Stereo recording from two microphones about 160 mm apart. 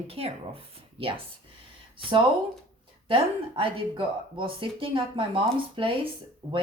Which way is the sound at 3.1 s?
35° right (ahead or behind).